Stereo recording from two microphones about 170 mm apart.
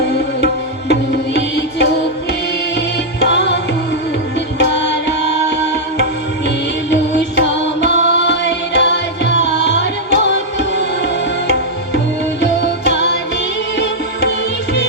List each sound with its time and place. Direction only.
0.4 s music: 80° left
3.2 s music: 85° left
6.9 s music: 90° left